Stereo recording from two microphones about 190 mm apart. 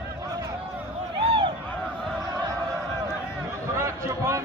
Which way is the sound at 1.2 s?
25° right (ahead or behind).